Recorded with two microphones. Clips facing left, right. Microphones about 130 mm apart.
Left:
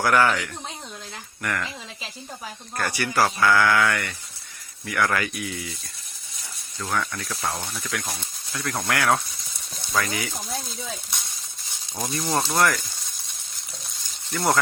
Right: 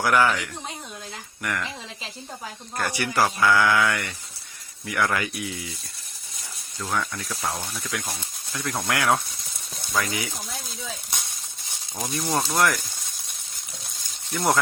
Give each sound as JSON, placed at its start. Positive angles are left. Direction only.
{"t": 0.0, "sound": "speech", "side_deg": -10}
{"t": 1.4, "sound": "speech", "side_deg": -10}
{"t": 2.7, "sound": "speech", "side_deg": -15}
{"t": 6.9, "sound": "speech", "side_deg": -10}
{"t": 8.9, "sound": "speech", "side_deg": -15}
{"t": 12.1, "sound": "speech", "side_deg": -10}
{"t": 14.3, "sound": "speech", "side_deg": -10}